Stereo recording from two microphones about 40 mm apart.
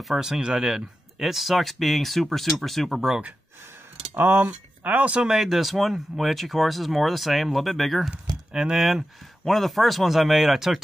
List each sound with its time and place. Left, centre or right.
0.2 s speech: centre
4.1 s speech: right
4.5 s speech: right
5.2 s speech: centre
8.5 s speech: centre
9.4 s speech: centre